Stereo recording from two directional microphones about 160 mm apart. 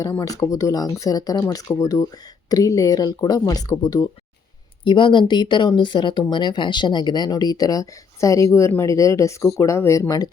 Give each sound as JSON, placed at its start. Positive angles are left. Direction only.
{"t": 0.0, "sound": "speech", "side_deg": 20}